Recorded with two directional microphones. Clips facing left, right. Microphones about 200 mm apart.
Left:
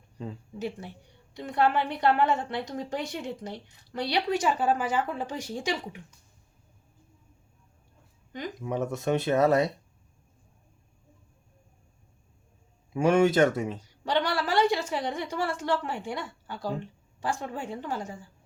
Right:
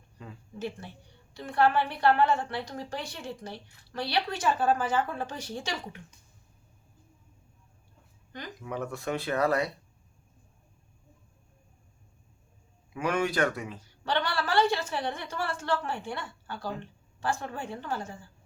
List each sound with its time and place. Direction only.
1.3 s a woman's voice: 20° left (ahead or behind)
8.6 s a woman's voice: 20° left (ahead or behind)
12.9 s a man's voice: 25° left (ahead or behind)